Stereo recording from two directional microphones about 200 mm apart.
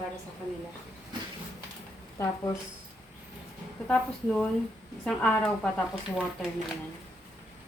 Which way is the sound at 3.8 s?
5° left (ahead or behind).